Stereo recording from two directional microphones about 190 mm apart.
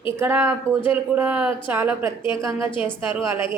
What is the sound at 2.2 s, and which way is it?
Speech, 25° left (ahead or behind).